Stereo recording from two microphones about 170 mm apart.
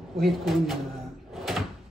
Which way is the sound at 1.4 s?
Centre (ahead or behind).